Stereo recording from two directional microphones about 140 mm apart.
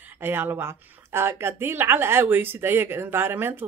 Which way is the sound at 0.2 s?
15° right (ahead or behind).